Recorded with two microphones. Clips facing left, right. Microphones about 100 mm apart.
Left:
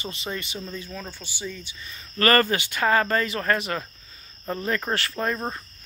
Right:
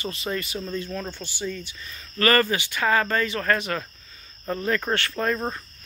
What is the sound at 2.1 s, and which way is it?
Speech, 40° left (ahead or behind).